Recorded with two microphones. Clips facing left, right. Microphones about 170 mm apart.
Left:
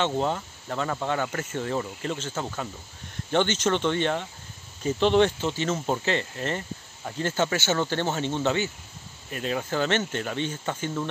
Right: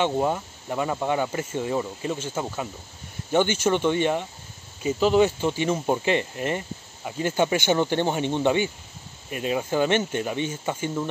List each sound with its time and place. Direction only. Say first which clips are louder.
0.0 s speech: right 2 dB; 10° right (ahead or behind)